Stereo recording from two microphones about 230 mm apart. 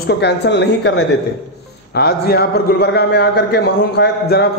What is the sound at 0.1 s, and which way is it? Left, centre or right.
A man's voice, left.